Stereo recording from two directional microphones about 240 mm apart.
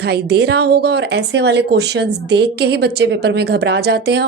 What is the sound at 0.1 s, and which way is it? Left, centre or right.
A woman's voice, right.